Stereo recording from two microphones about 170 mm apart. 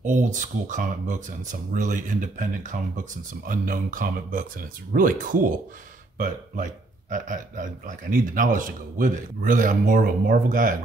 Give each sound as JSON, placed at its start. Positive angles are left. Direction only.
{"t": 0.0, "sound": "a man's voice", "side_deg": -45}